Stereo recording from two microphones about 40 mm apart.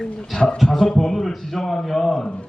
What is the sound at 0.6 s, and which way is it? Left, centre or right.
Speech, centre.